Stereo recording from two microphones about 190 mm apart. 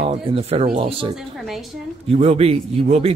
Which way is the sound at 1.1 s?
Centre (ahead or behind).